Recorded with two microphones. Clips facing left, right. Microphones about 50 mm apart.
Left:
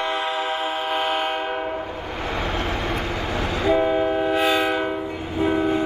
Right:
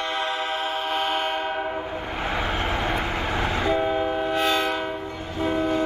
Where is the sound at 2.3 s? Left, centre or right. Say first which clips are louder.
Even; centre.